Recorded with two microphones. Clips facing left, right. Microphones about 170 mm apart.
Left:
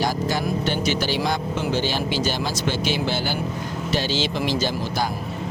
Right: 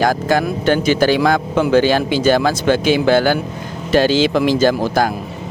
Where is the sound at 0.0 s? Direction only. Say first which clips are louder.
Right 8 dB; 50° right (ahead or behind).